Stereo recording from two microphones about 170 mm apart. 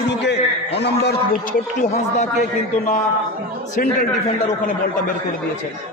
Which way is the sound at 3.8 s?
55° left (ahead or behind).